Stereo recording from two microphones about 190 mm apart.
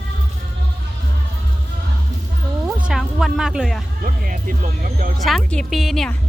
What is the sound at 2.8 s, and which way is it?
Speech, centre (ahead or behind).